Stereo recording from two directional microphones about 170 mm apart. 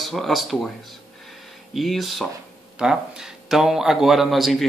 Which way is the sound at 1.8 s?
Centre (ahead or behind).